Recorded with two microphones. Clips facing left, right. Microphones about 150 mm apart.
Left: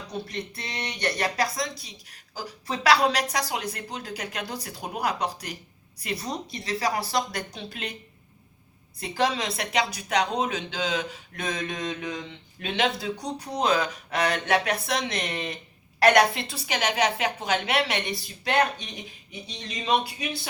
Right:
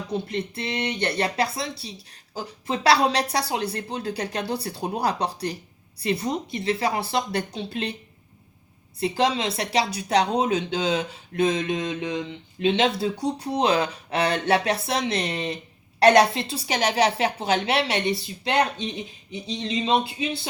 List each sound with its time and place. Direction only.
0.1 s a woman's voice: 25° right (ahead or behind)
9.0 s a woman's voice: 25° right (ahead or behind)